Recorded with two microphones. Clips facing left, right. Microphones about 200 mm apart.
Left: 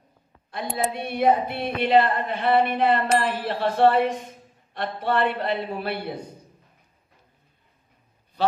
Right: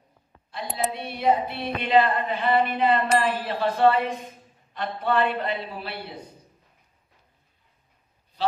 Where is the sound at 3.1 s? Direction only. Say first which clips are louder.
Even; centre (ahead or behind).